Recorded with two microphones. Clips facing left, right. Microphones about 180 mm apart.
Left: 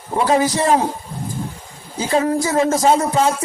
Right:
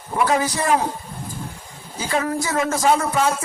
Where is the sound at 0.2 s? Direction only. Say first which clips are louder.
Left 4 dB; 25° left (ahead or behind).